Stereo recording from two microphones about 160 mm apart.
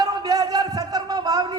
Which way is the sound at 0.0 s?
25° right (ahead or behind).